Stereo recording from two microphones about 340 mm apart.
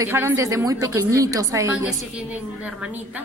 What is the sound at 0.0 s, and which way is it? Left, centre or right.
A woman's voice, centre.